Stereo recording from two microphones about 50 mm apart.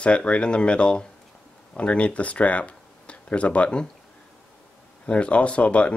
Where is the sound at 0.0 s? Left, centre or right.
Left.